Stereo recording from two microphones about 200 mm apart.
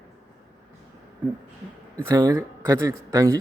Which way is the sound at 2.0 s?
15° right (ahead or behind).